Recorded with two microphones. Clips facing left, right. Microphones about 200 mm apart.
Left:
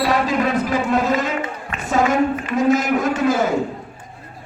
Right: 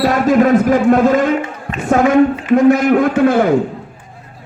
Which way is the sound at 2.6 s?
60° right (ahead or behind).